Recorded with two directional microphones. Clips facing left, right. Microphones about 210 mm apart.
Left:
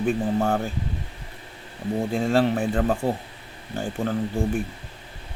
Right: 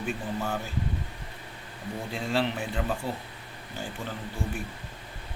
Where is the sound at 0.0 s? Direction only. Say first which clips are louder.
Left 9 dB; 50° left (ahead or behind).